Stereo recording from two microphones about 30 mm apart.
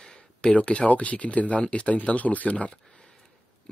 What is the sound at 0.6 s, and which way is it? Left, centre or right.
Speech, left.